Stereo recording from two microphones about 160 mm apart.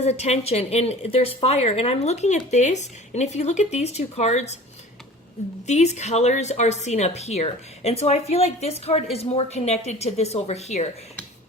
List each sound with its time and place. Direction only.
0.0 s speech: 45° left (ahead or behind)
5.6 s speech: 45° left (ahead or behind)